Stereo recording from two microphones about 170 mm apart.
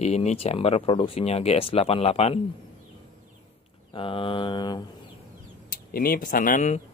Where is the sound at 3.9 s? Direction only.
30° left (ahead or behind).